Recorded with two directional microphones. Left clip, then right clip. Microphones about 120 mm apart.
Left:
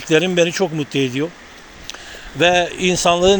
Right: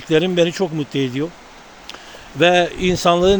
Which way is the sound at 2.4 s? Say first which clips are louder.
Even; 40° right (ahead or behind).